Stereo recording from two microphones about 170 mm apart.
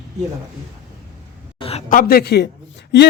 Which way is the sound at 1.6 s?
35° left (ahead or behind).